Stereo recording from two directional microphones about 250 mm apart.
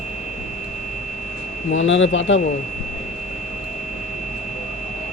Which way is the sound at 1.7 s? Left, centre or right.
Left.